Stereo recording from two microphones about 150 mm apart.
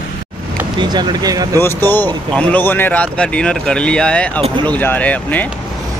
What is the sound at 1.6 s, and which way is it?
Speech, 15° left (ahead or behind).